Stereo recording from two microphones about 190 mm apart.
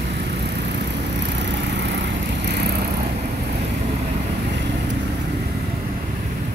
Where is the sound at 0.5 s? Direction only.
65° right (ahead or behind).